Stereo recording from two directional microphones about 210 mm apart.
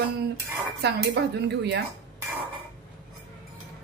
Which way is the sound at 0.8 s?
55° right (ahead or behind).